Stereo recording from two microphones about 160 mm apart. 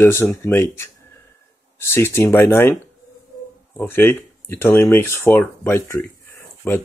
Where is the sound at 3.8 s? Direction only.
15° left (ahead or behind).